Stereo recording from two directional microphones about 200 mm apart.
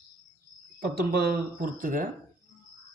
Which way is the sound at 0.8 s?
50° right (ahead or behind).